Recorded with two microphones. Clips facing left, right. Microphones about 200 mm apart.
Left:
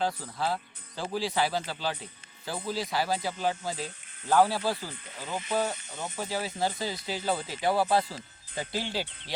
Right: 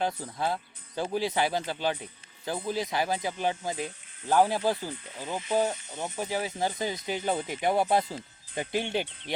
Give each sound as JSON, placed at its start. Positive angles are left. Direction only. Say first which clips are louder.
{"t": 0.0, "sound": "speech", "louder": "right 1 dB", "side_deg": -20}